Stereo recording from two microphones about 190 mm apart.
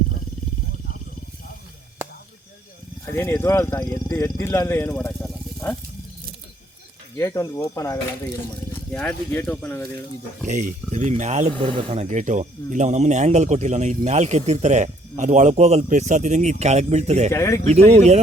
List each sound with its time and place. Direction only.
3.1 s speech: 10° left (ahead or behind)
7.2 s speech: 15° left (ahead or behind)
10.4 s speech: 40° right (ahead or behind)
17.3 s speech: 15° left (ahead or behind)
17.7 s speech: 35° right (ahead or behind)